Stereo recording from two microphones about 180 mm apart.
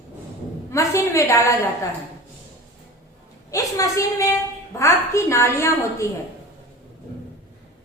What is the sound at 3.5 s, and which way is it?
A woman's voice, 20° left (ahead or behind).